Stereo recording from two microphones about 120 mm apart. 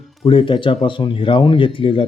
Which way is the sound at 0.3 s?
45° left (ahead or behind).